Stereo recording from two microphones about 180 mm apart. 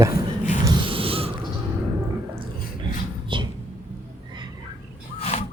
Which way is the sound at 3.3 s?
25° right (ahead or behind).